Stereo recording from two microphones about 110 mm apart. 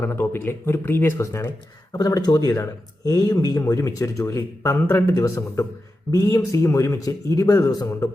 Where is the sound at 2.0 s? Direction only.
35° left (ahead or behind).